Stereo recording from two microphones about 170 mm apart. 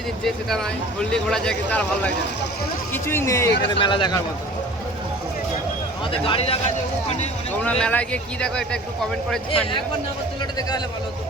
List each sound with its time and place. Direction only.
1.1 s a man's voice: 5° left (ahead or behind)
3.7 s speech: 30° left (ahead or behind)
6.1 s speech: 30° left (ahead or behind)
7.6 s speech: 10° left (ahead or behind)